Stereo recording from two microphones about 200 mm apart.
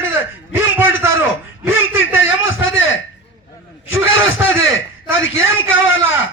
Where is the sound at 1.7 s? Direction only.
75° left (ahead or behind).